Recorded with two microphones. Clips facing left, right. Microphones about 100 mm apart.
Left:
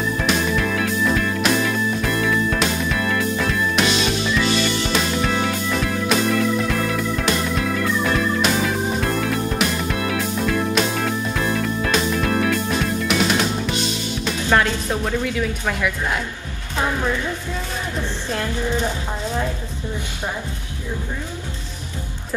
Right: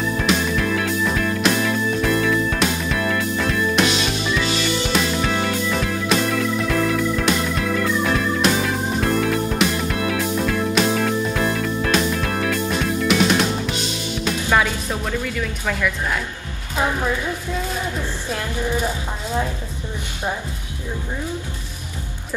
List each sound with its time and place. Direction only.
0.2 s music: centre (ahead or behind)